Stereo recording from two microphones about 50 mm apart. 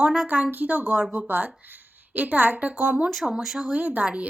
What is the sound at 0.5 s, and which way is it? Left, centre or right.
A woman's voice, right.